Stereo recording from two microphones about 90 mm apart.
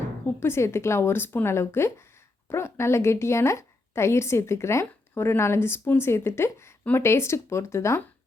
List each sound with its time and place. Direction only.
0.3 s a woman's voice: 30° left (ahead or behind)